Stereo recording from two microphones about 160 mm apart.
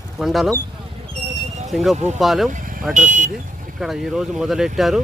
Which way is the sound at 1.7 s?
Centre (ahead or behind).